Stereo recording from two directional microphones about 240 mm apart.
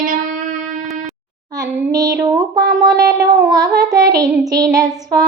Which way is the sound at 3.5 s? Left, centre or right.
Centre.